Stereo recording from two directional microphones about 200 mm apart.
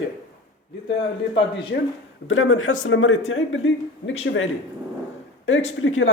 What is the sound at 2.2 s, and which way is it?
Speech, 90° left.